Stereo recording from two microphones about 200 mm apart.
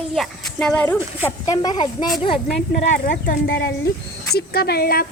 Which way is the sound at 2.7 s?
40° left (ahead or behind).